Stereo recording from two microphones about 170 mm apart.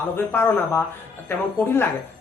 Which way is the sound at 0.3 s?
10° left (ahead or behind).